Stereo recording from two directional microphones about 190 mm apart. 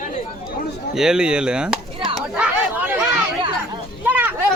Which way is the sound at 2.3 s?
10° right (ahead or behind).